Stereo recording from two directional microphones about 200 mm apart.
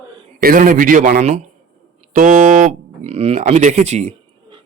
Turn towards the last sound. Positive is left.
turn(degrees=-30)  # may be behind; listen again after turning